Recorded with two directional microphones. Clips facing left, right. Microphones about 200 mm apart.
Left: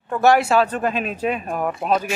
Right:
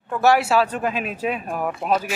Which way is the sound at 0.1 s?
5° right (ahead or behind).